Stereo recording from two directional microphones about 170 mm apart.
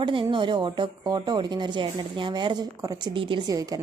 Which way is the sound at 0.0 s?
30° right (ahead or behind).